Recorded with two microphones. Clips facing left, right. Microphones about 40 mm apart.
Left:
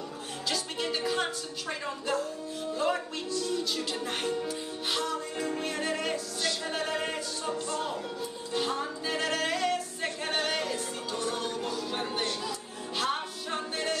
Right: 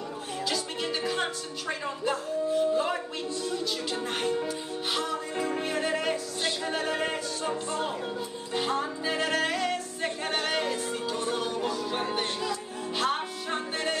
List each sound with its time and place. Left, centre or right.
0.5 s music: centre
3.5 s speech: centre
4.5 s music: centre
7.4 s music: right